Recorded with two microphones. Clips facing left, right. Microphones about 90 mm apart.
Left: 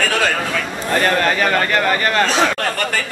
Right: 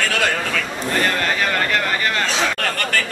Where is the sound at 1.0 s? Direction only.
45° left (ahead or behind).